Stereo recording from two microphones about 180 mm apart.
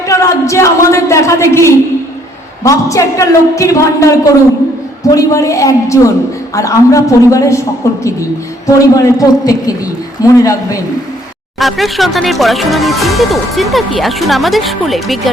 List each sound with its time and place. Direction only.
0.1 s a sound: 15° left (ahead or behind)
2.6 s a woman's voice: 15° left (ahead or behind)
11.6 s speech: centre (ahead or behind)